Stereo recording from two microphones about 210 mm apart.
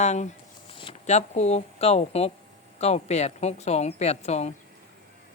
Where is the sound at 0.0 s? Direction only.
35° left (ahead or behind).